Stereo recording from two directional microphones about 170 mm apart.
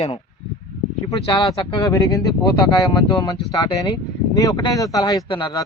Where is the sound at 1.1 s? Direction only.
30° left (ahead or behind).